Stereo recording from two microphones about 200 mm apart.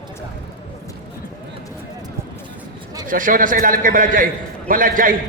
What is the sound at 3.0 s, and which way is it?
A man's voice, 45° right (ahead or behind).